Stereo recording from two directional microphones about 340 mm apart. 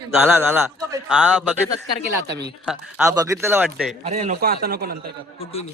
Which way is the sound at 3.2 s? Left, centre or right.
Centre.